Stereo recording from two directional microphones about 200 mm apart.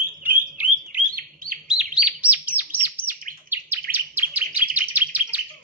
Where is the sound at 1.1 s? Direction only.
45° right (ahead or behind).